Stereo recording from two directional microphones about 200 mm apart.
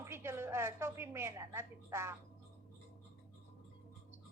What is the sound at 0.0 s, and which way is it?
A woman's voice, 15° right (ahead or behind).